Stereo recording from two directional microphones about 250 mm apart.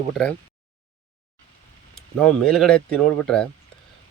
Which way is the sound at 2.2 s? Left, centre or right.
Centre.